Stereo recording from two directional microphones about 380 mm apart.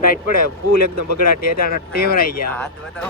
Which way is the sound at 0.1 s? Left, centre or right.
Left.